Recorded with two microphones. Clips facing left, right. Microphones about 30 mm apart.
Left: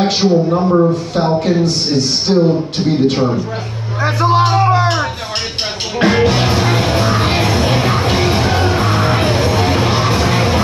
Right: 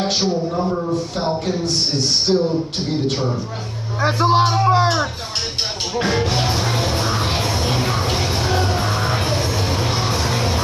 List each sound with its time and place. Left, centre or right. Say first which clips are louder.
0.0 s speech: left 7 dB; left
1.6 s a man's voice: left 6 dB; left
2.3 s a sound: left 5 dB; left
5.9 s music: left 8 dB; left